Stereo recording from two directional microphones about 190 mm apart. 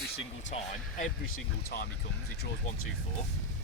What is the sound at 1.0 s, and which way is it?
Speech, 55° left (ahead or behind).